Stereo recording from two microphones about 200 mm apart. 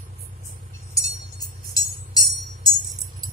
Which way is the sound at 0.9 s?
15° left (ahead or behind).